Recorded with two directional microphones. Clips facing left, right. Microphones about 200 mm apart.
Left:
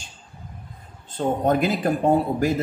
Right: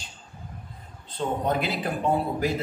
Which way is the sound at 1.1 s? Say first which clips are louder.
Left 5 dB; 45° left (ahead or behind).